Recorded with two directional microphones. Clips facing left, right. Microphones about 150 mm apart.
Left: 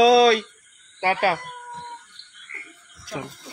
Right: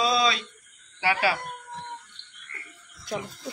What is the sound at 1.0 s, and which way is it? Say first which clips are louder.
Speech: left 4 dB; 50° left (ahead or behind).